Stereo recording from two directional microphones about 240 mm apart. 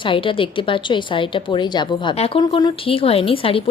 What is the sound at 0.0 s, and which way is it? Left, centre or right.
A woman's voice, left.